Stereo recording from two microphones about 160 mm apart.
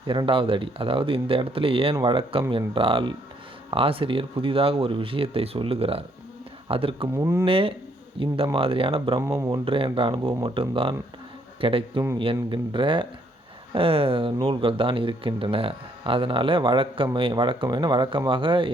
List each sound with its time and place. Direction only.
0.1 s speech: 30° right (ahead or behind)
7.1 s speech: 20° right (ahead or behind)
7.4 s speech: 35° right (ahead or behind)
9.2 s speech: 15° right (ahead or behind)
9.5 s speech: 35° right (ahead or behind)